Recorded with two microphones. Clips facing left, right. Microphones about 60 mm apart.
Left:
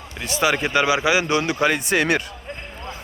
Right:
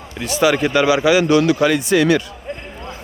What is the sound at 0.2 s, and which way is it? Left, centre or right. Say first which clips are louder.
Speech: right 5 dB; left.